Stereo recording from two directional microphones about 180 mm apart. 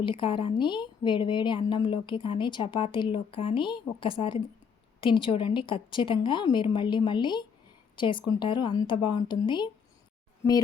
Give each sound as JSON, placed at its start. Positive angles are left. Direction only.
{"t": 0.0, "sound": "a woman's voice", "side_deg": 30}